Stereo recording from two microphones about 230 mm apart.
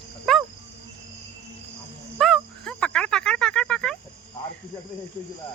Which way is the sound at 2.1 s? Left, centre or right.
Centre.